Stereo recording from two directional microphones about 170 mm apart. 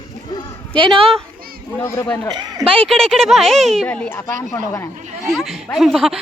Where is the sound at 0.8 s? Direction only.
30° right (ahead or behind).